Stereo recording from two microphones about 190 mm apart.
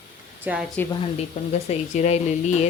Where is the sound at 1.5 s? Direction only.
35° left (ahead or behind).